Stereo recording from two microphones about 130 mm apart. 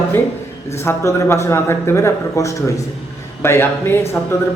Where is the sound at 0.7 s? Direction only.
20° left (ahead or behind).